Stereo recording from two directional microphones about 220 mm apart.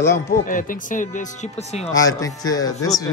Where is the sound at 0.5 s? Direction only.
40° left (ahead or behind).